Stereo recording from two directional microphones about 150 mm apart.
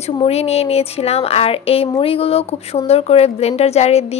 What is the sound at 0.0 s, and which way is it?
A woman's voice, 45° left (ahead or behind).